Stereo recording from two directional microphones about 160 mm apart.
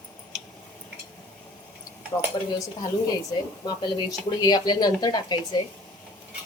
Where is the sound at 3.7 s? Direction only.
25° left (ahead or behind).